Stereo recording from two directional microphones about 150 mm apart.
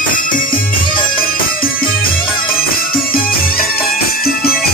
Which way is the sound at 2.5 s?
75° left (ahead or behind).